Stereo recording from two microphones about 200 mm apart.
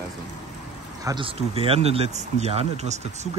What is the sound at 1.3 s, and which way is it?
Speech, 30° right (ahead or behind).